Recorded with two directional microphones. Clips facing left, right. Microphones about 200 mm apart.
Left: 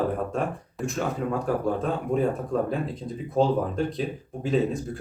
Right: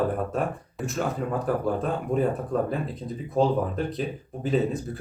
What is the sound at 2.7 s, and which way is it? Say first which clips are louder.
Speech: left 1 dB; centre (ahead or behind).